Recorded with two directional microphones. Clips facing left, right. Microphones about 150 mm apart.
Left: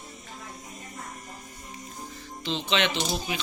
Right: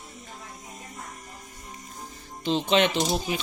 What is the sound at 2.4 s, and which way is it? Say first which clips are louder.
Speech: right 5 dB; 45° right (ahead or behind).